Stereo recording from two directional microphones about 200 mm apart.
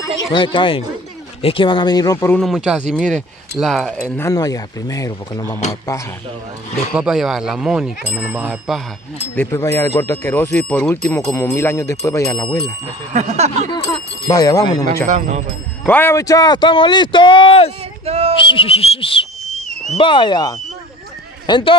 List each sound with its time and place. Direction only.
0.0 s speech: 20° left (ahead or behind)
2.4 s speech: 5° right (ahead or behind)
4.2 s speech: 15° left (ahead or behind)
6.9 s speech: 5° right (ahead or behind)
9.3 s speech: 10° left (ahead or behind)
13.1 s speech: 35° right (ahead or behind)
13.7 s speech: 25° left (ahead or behind)
15.0 s speech: 35° right (ahead or behind)
15.8 s speech: 10° left (ahead or behind); by 17.7 s 30° left (ahead or behind)
18.0 s speech: 30° right (ahead or behind)
18.4 s speech: 25° left (ahead or behind)